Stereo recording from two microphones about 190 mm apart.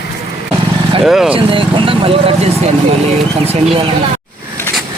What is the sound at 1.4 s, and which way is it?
Speech, 25° right (ahead or behind).